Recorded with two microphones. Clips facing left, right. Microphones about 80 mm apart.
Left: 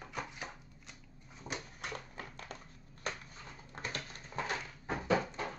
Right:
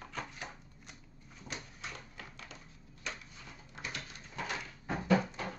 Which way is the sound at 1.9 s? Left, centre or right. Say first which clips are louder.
Left 4 dB; left.